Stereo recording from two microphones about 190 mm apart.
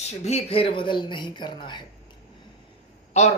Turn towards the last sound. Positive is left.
turn(degrees=35)  # may be behind; listen again after turning